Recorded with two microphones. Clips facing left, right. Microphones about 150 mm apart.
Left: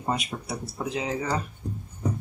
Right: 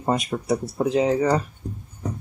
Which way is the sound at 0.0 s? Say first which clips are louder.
Right 6 dB; 45° right (ahead or behind).